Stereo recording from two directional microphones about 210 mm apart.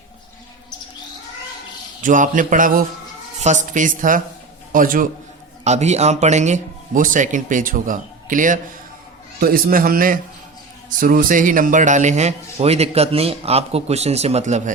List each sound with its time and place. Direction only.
2.0 s a man's voice: 40° right (ahead or behind)